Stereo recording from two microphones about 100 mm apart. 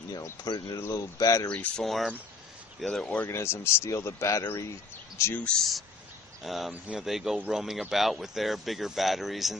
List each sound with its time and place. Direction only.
0.1 s speech: 40° left (ahead or behind)
0.7 s speech: 35° left (ahead or behind)
1.5 s speech: 10° left (ahead or behind)
1.9 s speech: centre (ahead or behind)
3.3 s speech: 25° left (ahead or behind)
5.4 s speech: 5° left (ahead or behind)
6.7 s speech: 10° right (ahead or behind)